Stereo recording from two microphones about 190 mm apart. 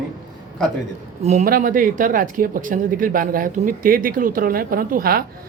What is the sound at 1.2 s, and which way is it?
Speech, 40° right (ahead or behind).